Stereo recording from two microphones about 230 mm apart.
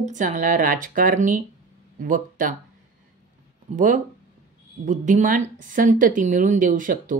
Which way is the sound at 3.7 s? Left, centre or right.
Right.